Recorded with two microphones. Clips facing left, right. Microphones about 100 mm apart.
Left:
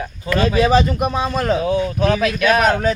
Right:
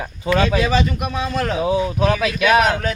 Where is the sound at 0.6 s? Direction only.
45° left (ahead or behind).